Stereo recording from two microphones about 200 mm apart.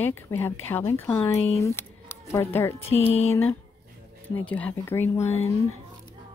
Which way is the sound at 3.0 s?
30° left (ahead or behind).